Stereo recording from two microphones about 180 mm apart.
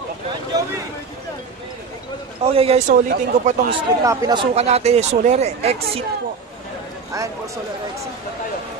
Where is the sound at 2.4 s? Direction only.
35° right (ahead or behind).